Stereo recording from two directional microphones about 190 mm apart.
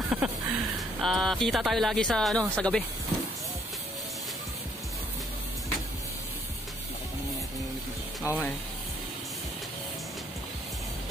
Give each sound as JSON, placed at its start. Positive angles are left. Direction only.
{"t": 0.1, "sound": "speech", "side_deg": -5}
{"t": 8.3, "sound": "speech", "side_deg": 15}